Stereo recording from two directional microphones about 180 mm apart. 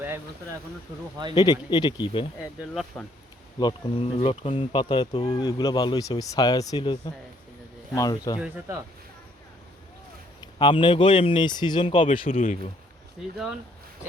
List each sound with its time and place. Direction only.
1.4 s speech: 25° left (ahead or behind)
3.6 s speech: 30° left (ahead or behind)
10.6 s speech: 25° left (ahead or behind)
13.3 s speech: centre (ahead or behind)